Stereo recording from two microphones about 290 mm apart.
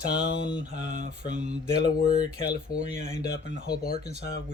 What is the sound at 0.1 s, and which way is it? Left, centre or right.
Mantra, left.